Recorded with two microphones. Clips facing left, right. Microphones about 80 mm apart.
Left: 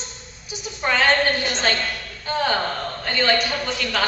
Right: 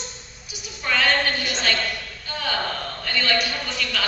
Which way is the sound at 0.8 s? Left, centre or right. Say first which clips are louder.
Left 3 dB; left.